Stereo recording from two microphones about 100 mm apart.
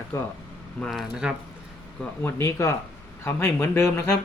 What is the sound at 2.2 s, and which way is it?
Speech, 30° left (ahead or behind).